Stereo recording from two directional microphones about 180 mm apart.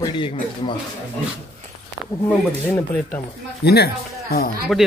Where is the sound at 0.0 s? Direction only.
25° left (ahead or behind).